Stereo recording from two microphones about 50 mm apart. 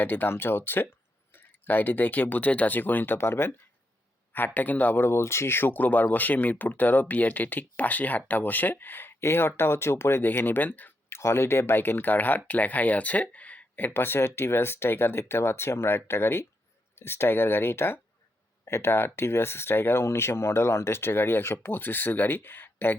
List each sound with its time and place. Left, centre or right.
0.0 s speech: left
3.2 s speech: left
4.3 s speech: left
5.0 s speech: left
9.2 s speech: left
10.2 s speech: left
11.1 s speech: left
13.9 s speech: left